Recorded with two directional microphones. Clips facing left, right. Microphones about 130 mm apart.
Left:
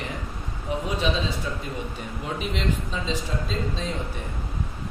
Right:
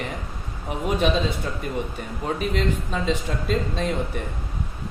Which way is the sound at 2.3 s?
50° right (ahead or behind).